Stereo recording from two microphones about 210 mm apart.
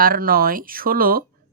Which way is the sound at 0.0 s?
45° right (ahead or behind).